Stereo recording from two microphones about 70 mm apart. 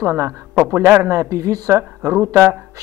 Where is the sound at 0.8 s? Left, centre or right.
Right.